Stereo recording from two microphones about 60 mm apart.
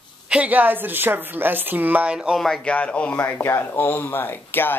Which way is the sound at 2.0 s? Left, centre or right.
Centre.